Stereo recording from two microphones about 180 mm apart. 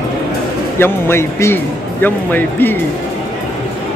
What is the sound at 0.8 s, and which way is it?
A man's voice, 15° left (ahead or behind).